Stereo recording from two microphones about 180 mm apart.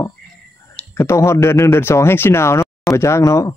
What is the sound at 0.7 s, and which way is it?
Speech, 15° left (ahead or behind).